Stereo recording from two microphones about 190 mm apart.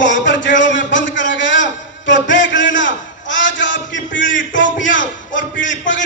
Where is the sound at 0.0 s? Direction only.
75° left (ahead or behind).